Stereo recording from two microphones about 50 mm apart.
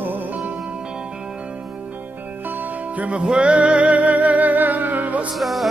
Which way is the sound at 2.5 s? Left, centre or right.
Right.